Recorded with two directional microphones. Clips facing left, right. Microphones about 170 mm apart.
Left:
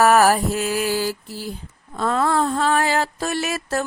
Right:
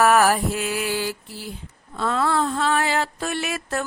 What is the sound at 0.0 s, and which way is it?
Mantra, 40° left (ahead or behind).